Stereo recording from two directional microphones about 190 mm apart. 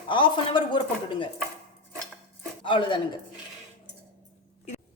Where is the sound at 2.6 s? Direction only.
25° left (ahead or behind).